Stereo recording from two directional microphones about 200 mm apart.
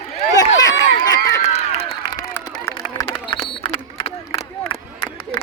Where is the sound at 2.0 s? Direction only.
15° left (ahead or behind).